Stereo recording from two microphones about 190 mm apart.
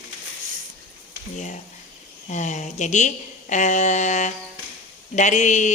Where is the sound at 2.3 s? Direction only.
40° left (ahead or behind).